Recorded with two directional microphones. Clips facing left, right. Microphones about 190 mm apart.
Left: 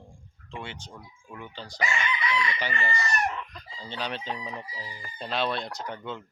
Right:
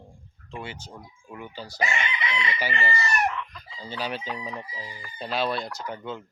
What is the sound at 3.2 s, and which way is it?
Chicken, 35° left (ahead or behind).